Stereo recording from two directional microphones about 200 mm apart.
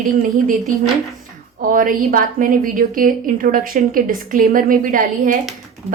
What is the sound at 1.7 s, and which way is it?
A woman's voice, 45° right (ahead or behind).